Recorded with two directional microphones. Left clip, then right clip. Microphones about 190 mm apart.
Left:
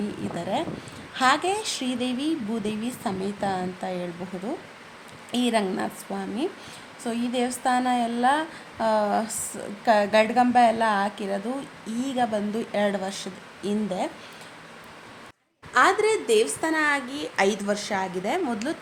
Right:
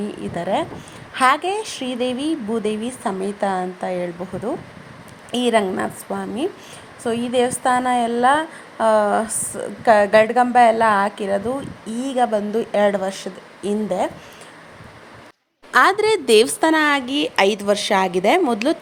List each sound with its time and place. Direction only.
0.3 s a woman's voice: 15° right (ahead or behind)
15.7 s a woman's voice: 45° right (ahead or behind); by 18.8 s 30° right (ahead or behind)